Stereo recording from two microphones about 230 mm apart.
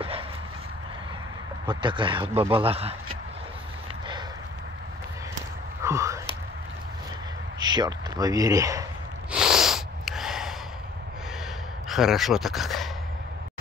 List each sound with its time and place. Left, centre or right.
1.7 s speech: right
5.9 s a sound: centre
7.6 s speech: centre
9.3 s snort: centre
11.9 s speech: centre